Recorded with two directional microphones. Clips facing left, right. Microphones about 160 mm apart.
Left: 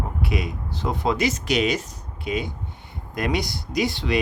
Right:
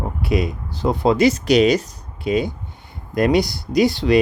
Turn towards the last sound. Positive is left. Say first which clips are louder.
# right 8 dB
turn(degrees=-35)  # may be behind; listen again after turning